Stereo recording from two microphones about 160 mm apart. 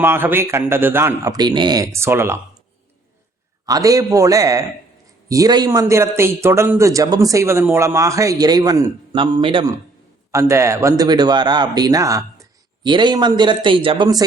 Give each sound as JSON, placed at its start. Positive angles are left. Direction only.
{"t": 0.0, "sound": "a man's voice", "side_deg": -15}
{"t": 3.7, "sound": "a man's voice", "side_deg": -20}
{"t": 10.3, "sound": "a man's voice", "side_deg": -20}